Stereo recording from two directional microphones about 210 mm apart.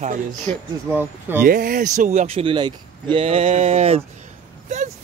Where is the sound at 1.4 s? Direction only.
40° right (ahead or behind).